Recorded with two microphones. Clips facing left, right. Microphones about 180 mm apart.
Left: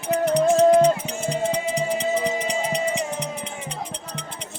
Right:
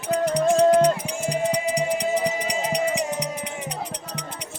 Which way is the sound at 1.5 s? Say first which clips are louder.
Right 1 dB; 15° right (ahead or behind).